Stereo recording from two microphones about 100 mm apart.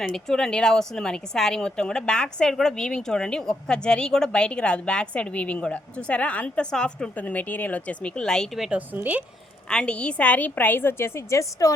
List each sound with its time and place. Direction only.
0.1 s a woman's voice: 5° left (ahead or behind)
9.6 s a woman's voice: 10° left (ahead or behind); by 11.7 s 30° left (ahead or behind)